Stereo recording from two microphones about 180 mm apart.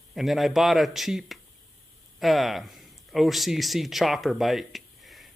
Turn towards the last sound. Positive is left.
turn(degrees=0)  # may be behind; listen again after turning